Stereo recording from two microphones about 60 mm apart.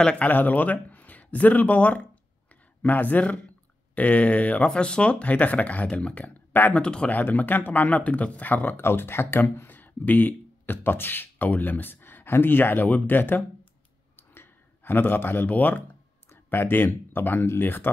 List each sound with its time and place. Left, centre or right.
0.2 s speech: left
7.1 s speech: left
14.1 s clicking: left
16.3 s speech: left